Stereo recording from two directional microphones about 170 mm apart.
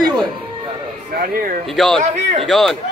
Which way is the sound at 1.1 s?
60° right (ahead or behind).